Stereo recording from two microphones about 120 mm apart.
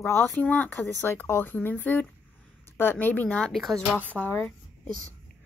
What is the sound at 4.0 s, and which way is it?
Speech, 15° left (ahead or behind).